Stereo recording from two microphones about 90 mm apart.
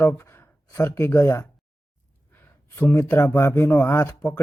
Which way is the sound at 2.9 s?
25° left (ahead or behind).